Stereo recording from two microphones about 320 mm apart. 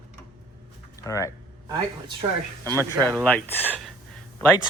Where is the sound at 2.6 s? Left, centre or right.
Centre.